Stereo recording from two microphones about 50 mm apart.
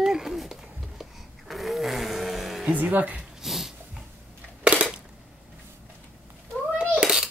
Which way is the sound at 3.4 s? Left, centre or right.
Centre.